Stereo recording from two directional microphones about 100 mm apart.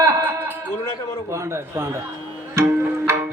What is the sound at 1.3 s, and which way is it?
Speech, 30° right (ahead or behind).